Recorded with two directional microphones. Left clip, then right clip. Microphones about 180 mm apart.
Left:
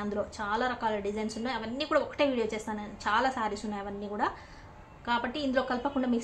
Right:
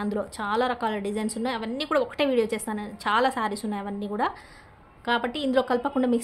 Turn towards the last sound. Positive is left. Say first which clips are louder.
# right 6 dB
turn(degrees=-50)  # may be behind; listen again after turning